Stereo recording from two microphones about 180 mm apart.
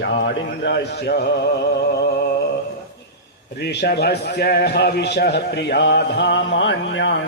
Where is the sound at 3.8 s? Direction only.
65° left (ahead or behind); by 7.1 s 90° left.